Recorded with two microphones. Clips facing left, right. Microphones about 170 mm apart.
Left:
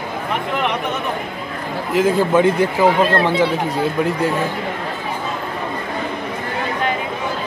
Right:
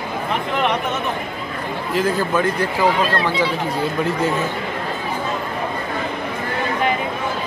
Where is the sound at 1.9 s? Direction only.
20° left (ahead or behind).